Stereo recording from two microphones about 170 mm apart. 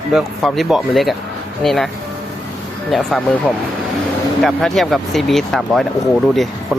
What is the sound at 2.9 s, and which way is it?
Speech, 5° left (ahead or behind).